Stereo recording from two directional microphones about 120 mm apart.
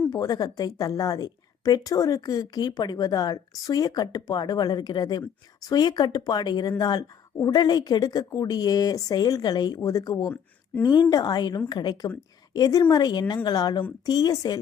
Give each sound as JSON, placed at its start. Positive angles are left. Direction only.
{"t": 0.1, "sound": "a woman's voice", "side_deg": 35}